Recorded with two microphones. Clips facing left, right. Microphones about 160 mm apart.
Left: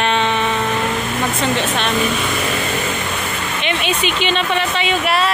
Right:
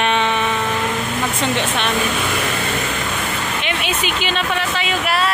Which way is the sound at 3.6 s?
5° right (ahead or behind).